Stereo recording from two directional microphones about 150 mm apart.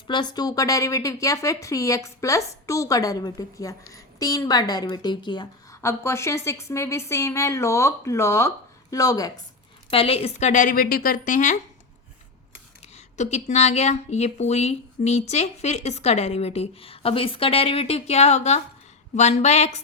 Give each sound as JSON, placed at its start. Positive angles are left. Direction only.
{"t": 0.1, "sound": "speech", "side_deg": 30}
{"t": 5.8, "sound": "speech", "side_deg": 15}
{"t": 9.9, "sound": "a woman's voice", "side_deg": 40}
{"t": 12.8, "sound": "speech", "side_deg": 50}